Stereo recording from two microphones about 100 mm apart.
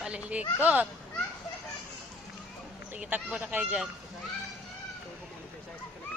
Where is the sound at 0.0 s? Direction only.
10° right (ahead or behind).